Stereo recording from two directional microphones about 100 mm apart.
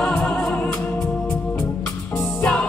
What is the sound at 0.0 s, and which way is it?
Music, 10° left (ahead or behind).